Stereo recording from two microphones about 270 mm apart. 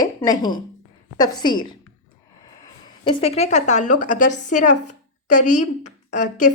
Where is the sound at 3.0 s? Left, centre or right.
Left.